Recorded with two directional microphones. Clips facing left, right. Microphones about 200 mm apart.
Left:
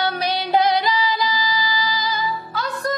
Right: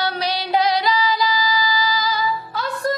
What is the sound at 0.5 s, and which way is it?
Music, 50° left (ahead or behind).